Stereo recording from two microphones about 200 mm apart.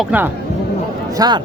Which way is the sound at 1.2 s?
20° right (ahead or behind).